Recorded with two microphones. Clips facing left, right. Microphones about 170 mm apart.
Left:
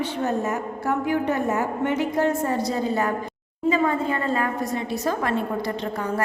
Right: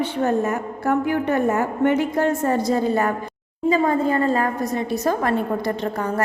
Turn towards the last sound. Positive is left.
turn(degrees=-45)  # may be behind; listen again after turning